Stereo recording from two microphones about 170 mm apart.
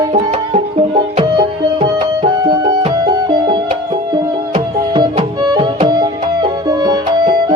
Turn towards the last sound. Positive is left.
turn(degrees=-20)  # may be behind; listen again after turning